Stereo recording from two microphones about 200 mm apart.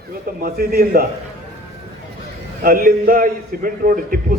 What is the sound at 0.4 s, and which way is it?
Speech, 50° right (ahead or behind).